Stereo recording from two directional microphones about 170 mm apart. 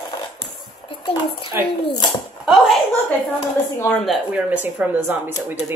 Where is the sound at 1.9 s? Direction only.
25° left (ahead or behind).